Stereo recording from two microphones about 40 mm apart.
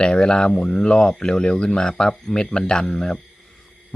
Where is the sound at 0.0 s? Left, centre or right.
Left.